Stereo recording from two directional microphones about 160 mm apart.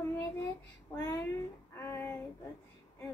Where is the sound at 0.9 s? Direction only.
20° left (ahead or behind).